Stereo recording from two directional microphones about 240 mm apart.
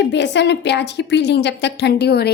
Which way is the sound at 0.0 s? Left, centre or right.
Left.